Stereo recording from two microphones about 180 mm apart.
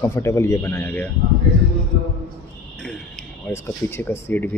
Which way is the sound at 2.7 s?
5° left (ahead or behind).